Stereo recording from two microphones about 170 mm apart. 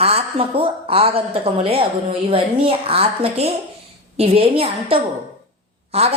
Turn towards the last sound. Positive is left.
turn(degrees=-35)  # may be behind; listen again after turning